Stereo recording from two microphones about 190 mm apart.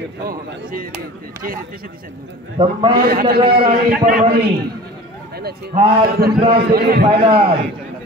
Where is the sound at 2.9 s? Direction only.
50° right (ahead or behind).